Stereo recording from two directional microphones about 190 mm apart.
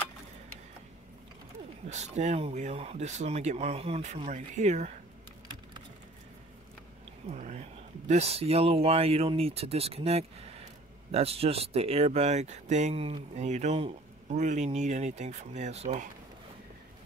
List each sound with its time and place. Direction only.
1.9 s speech: 35° right (ahead or behind)
7.2 s a sound: 40° right (ahead or behind)
8.1 s speech: 35° right (ahead or behind)